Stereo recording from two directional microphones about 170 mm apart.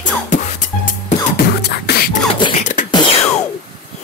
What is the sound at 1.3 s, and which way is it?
Beatboxing, 65° left (ahead or behind).